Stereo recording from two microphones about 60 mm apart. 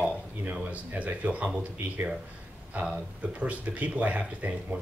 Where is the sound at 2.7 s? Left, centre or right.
Right.